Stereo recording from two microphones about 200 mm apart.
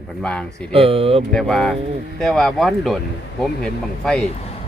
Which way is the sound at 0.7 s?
30° right (ahead or behind).